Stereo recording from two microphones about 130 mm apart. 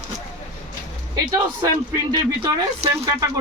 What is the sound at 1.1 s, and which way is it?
Speech, 30° right (ahead or behind).